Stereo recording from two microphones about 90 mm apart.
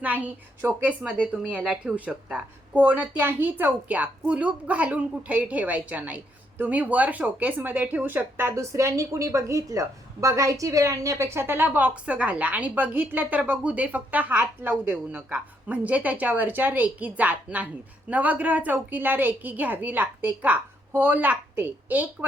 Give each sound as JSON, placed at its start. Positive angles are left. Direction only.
{"t": 0.0, "sound": "a woman's voice", "side_deg": -20}